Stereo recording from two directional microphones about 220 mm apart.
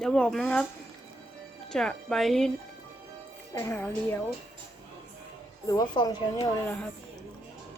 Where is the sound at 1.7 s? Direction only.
Centre (ahead or behind).